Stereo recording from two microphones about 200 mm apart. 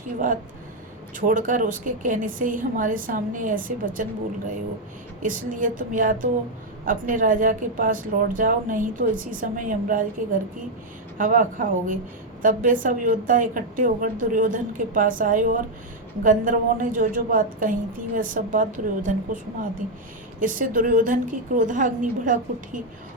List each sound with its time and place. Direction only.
1.1 s a woman's voice: 40° right (ahead or behind)
5.2 s a woman's voice: 40° right (ahead or behind)
20.4 s a woman's voice: 40° right (ahead or behind)